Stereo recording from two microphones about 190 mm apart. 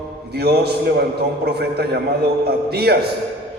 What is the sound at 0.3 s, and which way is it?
A man's voice, 60° right (ahead or behind).